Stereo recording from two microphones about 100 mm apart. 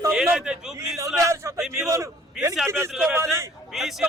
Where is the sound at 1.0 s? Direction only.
35° right (ahead or behind).